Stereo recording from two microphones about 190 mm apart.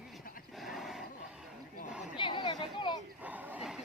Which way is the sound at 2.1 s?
25° left (ahead or behind).